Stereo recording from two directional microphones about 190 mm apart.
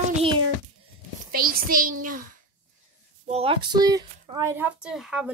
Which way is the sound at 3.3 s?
30° right (ahead or behind).